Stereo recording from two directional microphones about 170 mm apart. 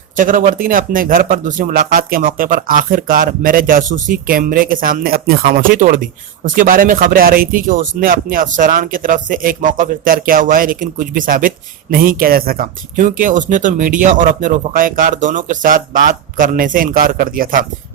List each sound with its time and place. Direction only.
0.2 s speech: 50° right (ahead or behind)